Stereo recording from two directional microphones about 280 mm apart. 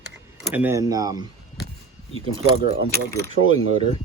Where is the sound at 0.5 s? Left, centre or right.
Centre.